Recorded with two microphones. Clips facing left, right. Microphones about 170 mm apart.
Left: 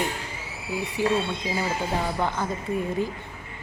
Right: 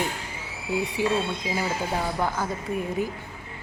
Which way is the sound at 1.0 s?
15° right (ahead or behind).